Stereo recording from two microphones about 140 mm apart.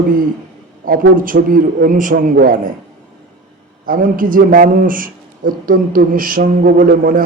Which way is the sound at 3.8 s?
85° right.